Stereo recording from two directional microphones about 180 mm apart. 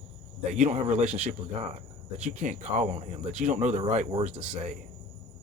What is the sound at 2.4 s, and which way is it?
Speech, 45° right (ahead or behind).